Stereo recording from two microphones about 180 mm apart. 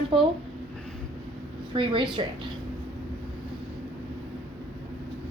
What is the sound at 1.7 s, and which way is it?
Speech, 30° right (ahead or behind).